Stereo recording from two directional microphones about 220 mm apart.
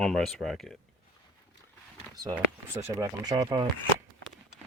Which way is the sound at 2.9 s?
15° right (ahead or behind).